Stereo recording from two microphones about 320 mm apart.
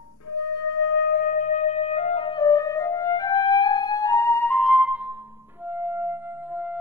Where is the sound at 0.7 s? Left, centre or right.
Left; by 5.1 s centre.